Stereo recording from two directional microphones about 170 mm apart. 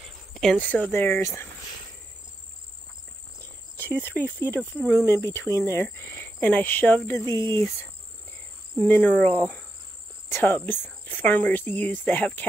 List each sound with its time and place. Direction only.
0.0 s speech: centre (ahead or behind)
3.7 s cricket: 10° left (ahead or behind)
4.2 s speech: 10° left (ahead or behind)
8.7 s speech: 10° left (ahead or behind)